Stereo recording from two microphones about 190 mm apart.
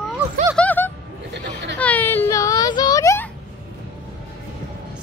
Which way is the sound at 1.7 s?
10° left (ahead or behind).